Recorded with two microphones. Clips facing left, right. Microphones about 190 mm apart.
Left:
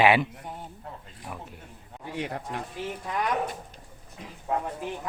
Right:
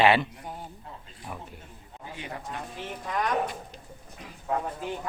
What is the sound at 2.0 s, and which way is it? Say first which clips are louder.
Speech: left 6 dB; 70° left (ahead or behind).